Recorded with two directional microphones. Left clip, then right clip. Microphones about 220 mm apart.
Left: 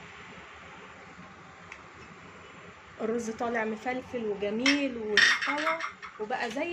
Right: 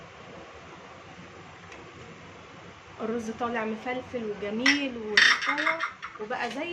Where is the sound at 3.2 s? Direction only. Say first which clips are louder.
Right 1 dB; 10° left (ahead or behind).